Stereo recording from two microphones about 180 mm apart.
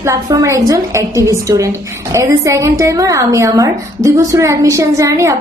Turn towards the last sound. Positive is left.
turn(degrees=-15)  # may be behind; listen again after turning